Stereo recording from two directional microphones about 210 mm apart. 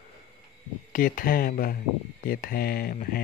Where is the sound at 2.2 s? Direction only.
45° left (ahead or behind).